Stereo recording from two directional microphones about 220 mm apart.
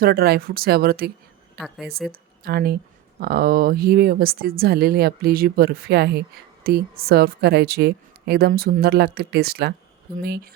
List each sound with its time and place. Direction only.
0.0 s speech: 45° right (ahead or behind)
1.5 s a woman's voice: centre (ahead or behind)
2.4 s speech: 45° right (ahead or behind)